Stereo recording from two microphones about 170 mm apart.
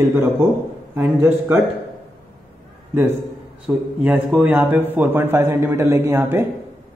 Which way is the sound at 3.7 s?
15° right (ahead or behind).